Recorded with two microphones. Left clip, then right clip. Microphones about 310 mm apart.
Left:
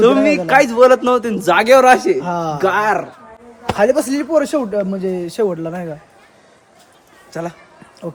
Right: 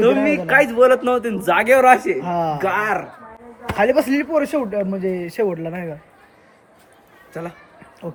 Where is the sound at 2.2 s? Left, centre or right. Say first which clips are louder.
Left 3 dB; centre.